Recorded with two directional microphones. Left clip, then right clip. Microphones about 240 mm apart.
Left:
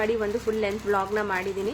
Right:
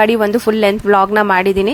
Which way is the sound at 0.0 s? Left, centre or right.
Right.